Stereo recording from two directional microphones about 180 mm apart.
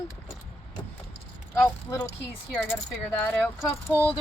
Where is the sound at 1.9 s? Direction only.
20° left (ahead or behind).